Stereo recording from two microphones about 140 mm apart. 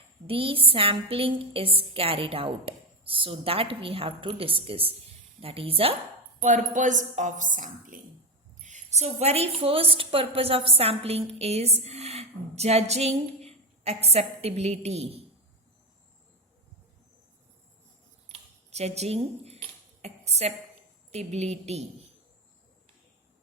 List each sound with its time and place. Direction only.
0.3 s a woman's voice: 40° right (ahead or behind)
6.4 s a woman's voice: 65° right (ahead or behind)
9.0 s a woman's voice: 50° right (ahead or behind)
18.3 s a sound: 50° right (ahead or behind)
21.1 s a woman's voice: 50° right (ahead or behind)